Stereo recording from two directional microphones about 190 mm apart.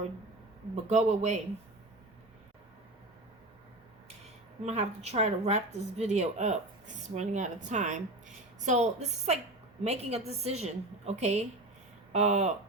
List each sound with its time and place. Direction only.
0.9 s speech: 35° right (ahead or behind)
4.6 s speech: 35° right (ahead or behind)